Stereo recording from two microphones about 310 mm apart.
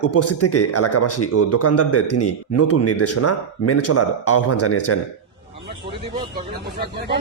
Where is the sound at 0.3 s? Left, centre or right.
Left.